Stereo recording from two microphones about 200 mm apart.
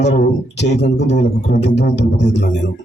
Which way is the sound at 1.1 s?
60° left (ahead or behind).